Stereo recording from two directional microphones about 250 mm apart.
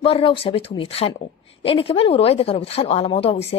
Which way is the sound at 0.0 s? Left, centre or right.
Left.